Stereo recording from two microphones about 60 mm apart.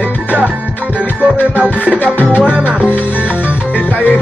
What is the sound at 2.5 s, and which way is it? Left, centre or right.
Music, right.